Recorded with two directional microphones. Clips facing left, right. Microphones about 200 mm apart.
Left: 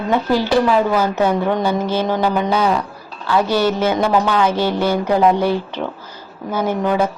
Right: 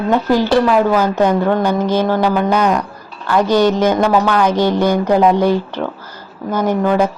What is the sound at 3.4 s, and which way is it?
Speech, 15° right (ahead or behind).